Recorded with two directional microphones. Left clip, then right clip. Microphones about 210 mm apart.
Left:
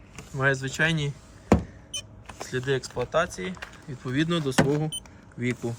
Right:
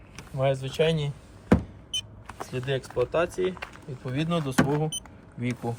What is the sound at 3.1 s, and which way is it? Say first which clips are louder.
Speech: even; 5° right (ahead or behind).